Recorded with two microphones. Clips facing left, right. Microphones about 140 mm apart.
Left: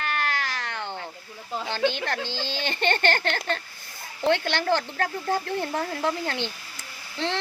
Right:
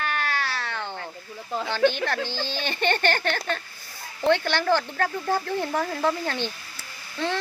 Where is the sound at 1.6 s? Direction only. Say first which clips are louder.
Right 4 dB; 15° left (ahead or behind).